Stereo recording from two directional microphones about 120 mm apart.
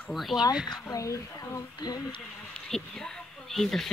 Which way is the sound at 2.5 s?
5° left (ahead or behind).